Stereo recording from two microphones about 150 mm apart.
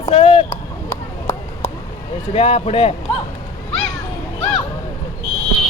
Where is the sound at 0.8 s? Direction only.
15° left (ahead or behind).